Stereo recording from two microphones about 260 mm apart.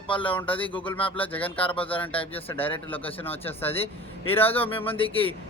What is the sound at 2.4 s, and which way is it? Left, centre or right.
Speech, centre.